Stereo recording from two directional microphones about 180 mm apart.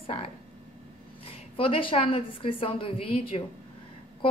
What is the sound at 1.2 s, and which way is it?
A woman's voice, 30° left (ahead or behind).